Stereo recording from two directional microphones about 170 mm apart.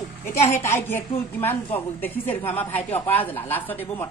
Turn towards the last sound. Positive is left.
turn(degrees=10)  # may be behind; listen again after turning